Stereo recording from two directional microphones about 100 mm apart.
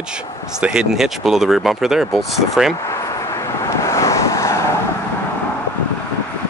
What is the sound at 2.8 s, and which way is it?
Vehicle, 30° left (ahead or behind).